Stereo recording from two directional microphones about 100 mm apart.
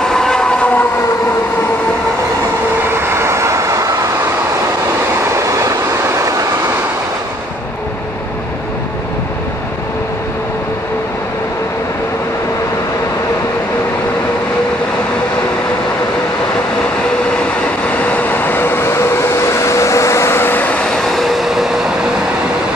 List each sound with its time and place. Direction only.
0.0 s train: 5° left (ahead or behind)
3.1 s vehicle: 25° right (ahead or behind)
6.0 s train: 35° right (ahead or behind)
18.0 s vehicle: 15° left (ahead or behind); by 21.8 s 5° right (ahead or behind)